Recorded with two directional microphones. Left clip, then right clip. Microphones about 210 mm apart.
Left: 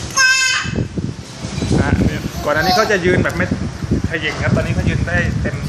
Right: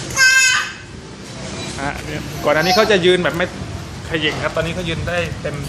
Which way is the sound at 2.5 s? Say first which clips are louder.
Even; 10° right (ahead or behind).